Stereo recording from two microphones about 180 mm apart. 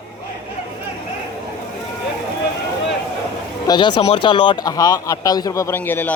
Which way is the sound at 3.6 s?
25° left (ahead or behind).